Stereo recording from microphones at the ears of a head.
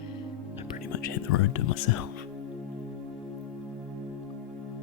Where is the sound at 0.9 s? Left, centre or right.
Left.